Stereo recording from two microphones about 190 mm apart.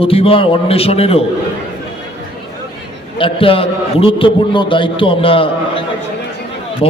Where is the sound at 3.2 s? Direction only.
30° left (ahead or behind).